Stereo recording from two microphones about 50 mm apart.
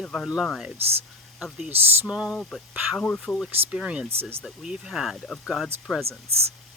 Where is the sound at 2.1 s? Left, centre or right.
Centre.